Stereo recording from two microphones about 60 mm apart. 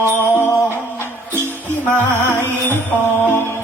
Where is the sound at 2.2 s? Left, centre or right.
Left.